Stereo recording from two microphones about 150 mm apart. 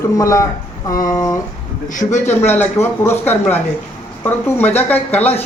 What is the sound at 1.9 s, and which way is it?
Speech, 55° left (ahead or behind).